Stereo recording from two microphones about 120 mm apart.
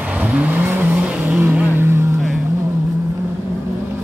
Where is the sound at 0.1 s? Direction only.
10° right (ahead or behind).